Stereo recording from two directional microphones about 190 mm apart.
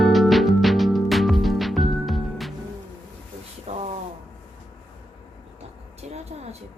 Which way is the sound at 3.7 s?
30° right (ahead or behind).